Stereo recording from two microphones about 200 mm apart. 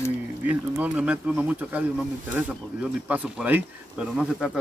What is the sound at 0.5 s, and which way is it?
A man's voice, 5° right (ahead or behind).